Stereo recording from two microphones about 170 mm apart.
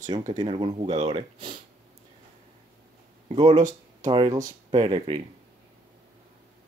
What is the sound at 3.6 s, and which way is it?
Speech, 45° right (ahead or behind).